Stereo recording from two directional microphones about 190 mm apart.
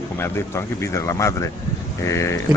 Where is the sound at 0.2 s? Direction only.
15° left (ahead or behind).